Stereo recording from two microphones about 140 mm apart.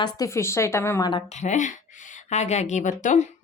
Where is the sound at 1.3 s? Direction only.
60° left (ahead or behind).